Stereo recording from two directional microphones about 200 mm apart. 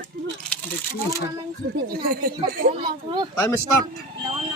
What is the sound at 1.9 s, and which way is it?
Speech, 45° right (ahead or behind).